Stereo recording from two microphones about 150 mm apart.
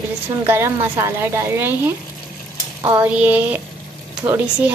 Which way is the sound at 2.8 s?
15° right (ahead or behind).